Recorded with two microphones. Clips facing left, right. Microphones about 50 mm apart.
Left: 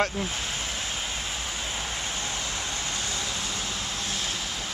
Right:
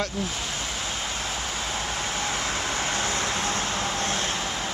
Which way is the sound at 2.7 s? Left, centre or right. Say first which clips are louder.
Right 5 dB; right.